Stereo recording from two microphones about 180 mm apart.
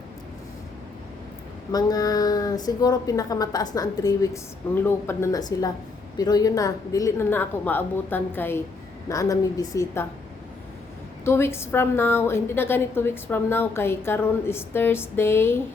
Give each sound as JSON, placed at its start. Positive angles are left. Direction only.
{"t": 1.7, "sound": "a woman's voice", "side_deg": 20}
{"t": 11.3, "sound": "a woman's voice", "side_deg": 15}